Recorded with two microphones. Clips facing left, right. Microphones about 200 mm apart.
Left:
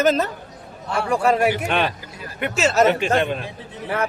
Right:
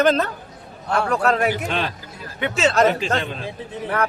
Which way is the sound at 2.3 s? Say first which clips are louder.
Even; 5° left (ahead or behind).